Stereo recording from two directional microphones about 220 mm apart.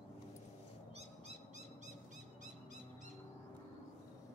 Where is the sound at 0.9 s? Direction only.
30° right (ahead or behind).